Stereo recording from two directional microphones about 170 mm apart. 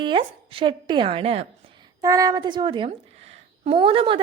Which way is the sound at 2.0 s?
20° right (ahead or behind).